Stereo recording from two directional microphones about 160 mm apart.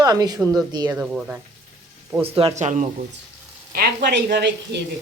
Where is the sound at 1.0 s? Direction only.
10° right (ahead or behind).